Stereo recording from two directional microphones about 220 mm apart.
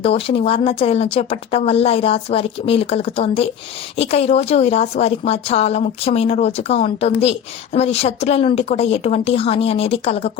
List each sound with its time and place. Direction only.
0.0 s a woman's voice: 25° left (ahead or behind)